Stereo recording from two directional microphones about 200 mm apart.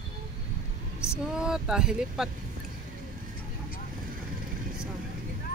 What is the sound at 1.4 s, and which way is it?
Speech, 5° right (ahead or behind).